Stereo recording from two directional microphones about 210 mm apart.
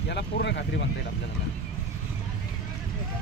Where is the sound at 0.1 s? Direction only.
55° left (ahead or behind).